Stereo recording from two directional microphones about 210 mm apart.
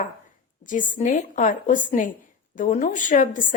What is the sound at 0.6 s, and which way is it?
Speech, 40° left (ahead or behind).